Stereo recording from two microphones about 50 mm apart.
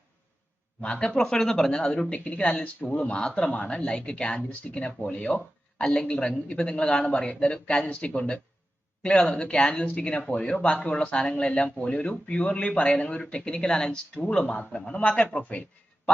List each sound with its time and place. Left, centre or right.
0.8 s speech: centre
9.0 s speech: centre
14.4 s a man's voice: left